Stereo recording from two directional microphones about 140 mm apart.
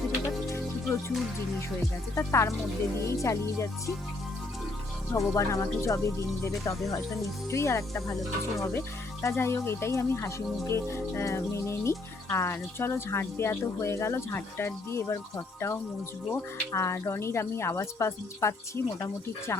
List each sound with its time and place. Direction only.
2.1 s speech: 20° left (ahead or behind)
5.1 s speech: 20° left (ahead or behind)